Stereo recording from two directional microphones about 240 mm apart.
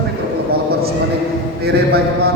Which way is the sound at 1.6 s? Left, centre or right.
Right.